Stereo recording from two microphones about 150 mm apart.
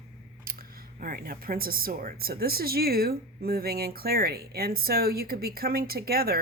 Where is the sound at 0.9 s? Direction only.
70° right (ahead or behind).